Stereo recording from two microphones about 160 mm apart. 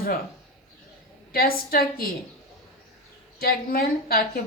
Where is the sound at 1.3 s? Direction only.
70° left (ahead or behind).